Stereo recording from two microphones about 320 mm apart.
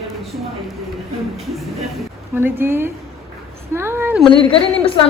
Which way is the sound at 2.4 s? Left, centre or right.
Centre.